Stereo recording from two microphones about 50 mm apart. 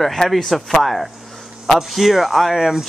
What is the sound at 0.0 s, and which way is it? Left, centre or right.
Speech, centre.